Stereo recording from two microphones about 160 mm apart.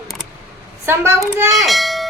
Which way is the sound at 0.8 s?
15° right (ahead or behind).